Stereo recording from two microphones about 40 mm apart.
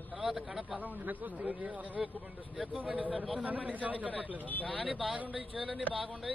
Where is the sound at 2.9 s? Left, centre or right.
Right.